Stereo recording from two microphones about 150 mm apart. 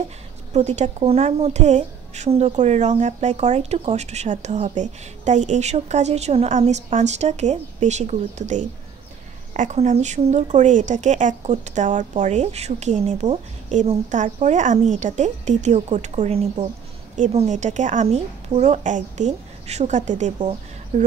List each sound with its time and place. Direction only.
0.5 s a woman's voice: 50° right (ahead or behind)
20.3 s a woman's voice: 45° right (ahead or behind)